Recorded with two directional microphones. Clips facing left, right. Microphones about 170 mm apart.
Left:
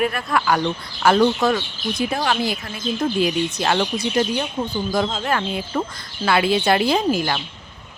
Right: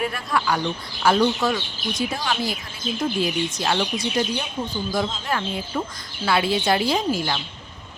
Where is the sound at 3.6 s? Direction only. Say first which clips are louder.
Left 3 dB; 55° left (ahead or behind).